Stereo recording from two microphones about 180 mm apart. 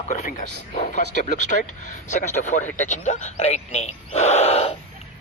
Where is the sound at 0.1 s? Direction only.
45° left (ahead or behind).